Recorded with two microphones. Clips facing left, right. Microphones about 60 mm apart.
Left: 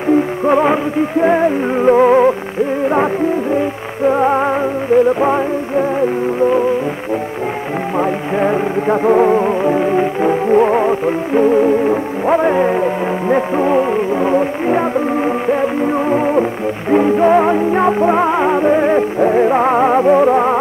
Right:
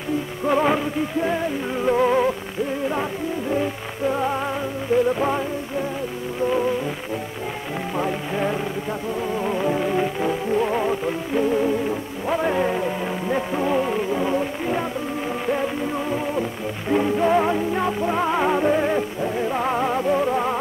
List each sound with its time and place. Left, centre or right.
0.5 s music: left
1.2 s music: left
4.0 s music: left
8.0 s music: left
9.0 s music: left
9.4 s music: left
16.9 s music: left
19.1 s music: left